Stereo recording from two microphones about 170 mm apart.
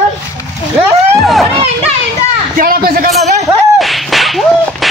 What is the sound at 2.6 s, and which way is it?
Speech, 60° right (ahead or behind).